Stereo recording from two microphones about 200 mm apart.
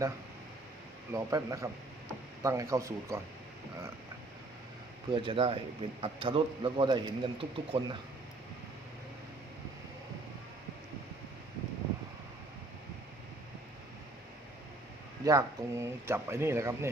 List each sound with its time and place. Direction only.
1.1 s speech: 15° right (ahead or behind)
5.1 s a man's voice: 25° right (ahead or behind)
15.2 s speech: 15° right (ahead or behind)